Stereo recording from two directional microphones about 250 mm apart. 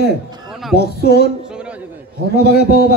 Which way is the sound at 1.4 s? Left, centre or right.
Centre.